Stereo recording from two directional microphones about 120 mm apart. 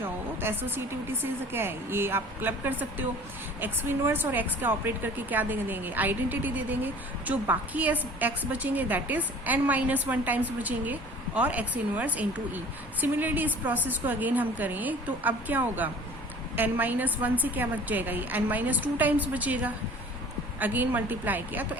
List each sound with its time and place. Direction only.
0.4 s a woman's voice: 20° right (ahead or behind)